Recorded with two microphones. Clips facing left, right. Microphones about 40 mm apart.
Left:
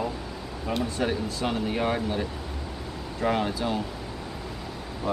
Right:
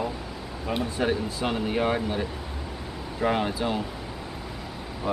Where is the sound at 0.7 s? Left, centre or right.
Centre.